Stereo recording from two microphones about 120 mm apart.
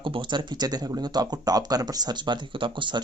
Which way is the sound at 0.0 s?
40° right (ahead or behind).